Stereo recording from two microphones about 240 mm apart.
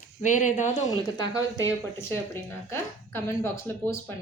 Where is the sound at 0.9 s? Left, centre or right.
Centre.